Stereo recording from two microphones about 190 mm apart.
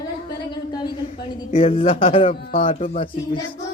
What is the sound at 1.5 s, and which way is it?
Speech, 30° left (ahead or behind).